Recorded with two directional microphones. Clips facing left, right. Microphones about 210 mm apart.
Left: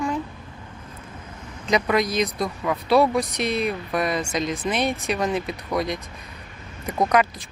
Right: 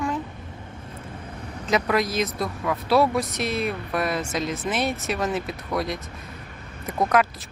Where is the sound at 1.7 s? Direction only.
5° right (ahead or behind).